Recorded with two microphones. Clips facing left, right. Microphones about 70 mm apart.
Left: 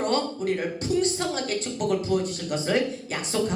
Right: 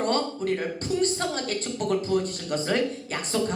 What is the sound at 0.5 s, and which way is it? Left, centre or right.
Speech, right.